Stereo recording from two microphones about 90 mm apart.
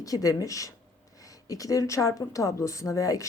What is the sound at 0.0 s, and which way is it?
Speech, 40° left (ahead or behind).